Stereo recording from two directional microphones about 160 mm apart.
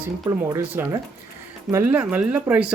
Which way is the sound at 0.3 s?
20° right (ahead or behind).